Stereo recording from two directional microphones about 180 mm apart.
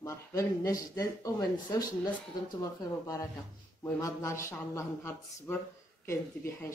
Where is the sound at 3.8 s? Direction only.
15° left (ahead or behind).